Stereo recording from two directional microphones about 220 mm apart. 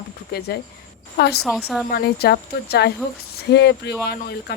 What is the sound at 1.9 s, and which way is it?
Speech, 45° left (ahead or behind).